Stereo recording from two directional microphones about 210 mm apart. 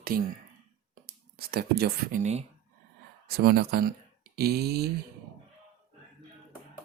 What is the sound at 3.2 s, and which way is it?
Speech, 45° right (ahead or behind).